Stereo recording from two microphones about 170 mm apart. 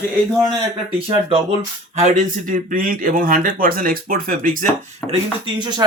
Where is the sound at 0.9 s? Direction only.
30° right (ahead or behind).